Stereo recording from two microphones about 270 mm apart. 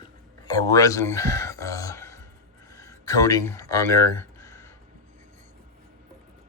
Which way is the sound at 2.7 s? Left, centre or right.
Centre.